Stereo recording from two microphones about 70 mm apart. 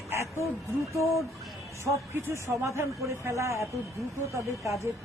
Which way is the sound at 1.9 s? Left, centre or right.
Right.